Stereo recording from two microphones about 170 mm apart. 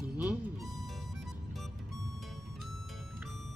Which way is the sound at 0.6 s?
20° right (ahead or behind).